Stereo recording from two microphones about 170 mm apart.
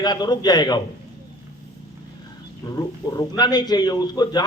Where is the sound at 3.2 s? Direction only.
25° left (ahead or behind).